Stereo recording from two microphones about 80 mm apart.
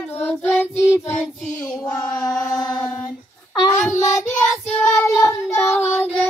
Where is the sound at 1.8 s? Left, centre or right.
Left.